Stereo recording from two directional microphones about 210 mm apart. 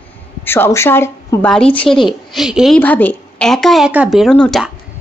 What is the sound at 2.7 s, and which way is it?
Speech, 10° left (ahead or behind).